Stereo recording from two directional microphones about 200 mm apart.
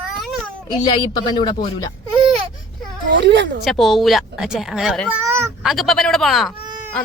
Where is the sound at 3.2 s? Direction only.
60° right (ahead or behind).